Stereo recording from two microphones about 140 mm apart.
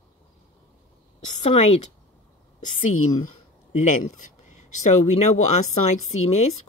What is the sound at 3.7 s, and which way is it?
Speech, 60° left (ahead or behind).